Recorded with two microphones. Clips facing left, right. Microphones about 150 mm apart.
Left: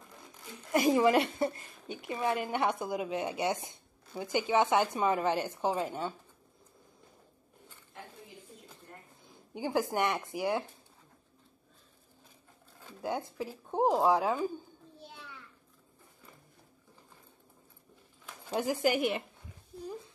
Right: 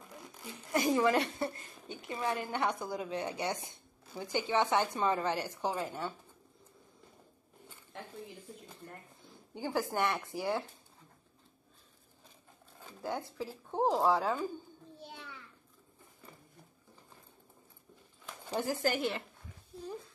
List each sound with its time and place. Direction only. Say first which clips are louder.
0.7 s a woman's voice: left 3 dB; 20° left (ahead or behind)
9.5 s speech: left 3 dB; 15° left (ahead or behind)
13.0 s speech: left 3 dB; 15° left (ahead or behind)
18.6 s speech: left 3 dB; 15° left (ahead or behind)